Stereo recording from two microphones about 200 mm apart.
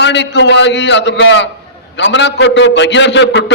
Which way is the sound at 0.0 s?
60° left (ahead or behind).